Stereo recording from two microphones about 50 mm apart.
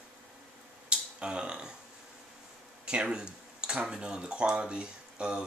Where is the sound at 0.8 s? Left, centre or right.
Centre.